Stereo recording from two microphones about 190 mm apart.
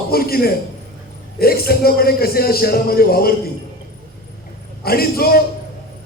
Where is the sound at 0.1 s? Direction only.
55° left (ahead or behind).